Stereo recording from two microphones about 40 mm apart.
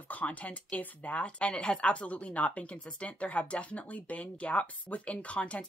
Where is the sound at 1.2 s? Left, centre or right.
Left.